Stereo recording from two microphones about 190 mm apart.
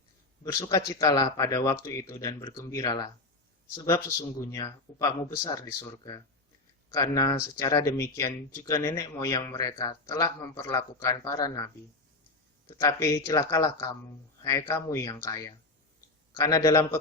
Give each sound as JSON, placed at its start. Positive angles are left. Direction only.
{"t": 0.4, "sound": "speech", "side_deg": 20}